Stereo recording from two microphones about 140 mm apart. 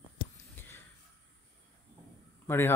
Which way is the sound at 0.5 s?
15° left (ahead or behind).